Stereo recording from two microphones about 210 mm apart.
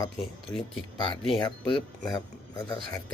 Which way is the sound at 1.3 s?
Centre (ahead or behind).